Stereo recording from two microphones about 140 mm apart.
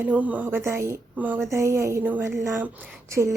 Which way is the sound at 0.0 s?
10° right (ahead or behind).